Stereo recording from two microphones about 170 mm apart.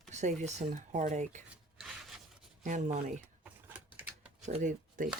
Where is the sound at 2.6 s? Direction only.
45° right (ahead or behind).